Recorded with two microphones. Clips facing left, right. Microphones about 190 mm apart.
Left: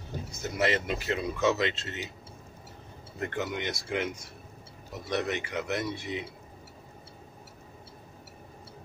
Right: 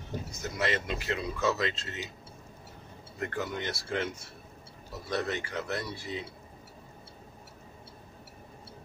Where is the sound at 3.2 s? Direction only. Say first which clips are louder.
Left 2 dB; 25° left (ahead or behind).